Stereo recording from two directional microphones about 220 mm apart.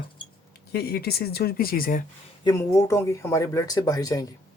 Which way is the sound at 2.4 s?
15° left (ahead or behind).